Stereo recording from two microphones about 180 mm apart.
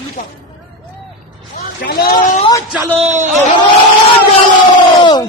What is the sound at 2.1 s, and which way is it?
Speech, 45° left (ahead or behind).